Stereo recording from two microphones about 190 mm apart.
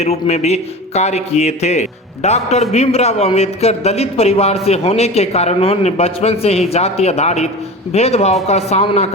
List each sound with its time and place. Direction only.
0.0 s a man's voice: 35° left (ahead or behind)